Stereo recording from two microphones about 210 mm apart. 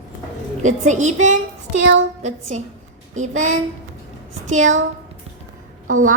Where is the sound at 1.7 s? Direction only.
60° right (ahead or behind).